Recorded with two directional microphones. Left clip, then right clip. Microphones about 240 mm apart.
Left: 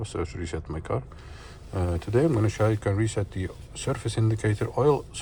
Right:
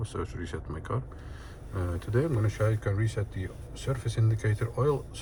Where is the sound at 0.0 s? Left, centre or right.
Centre.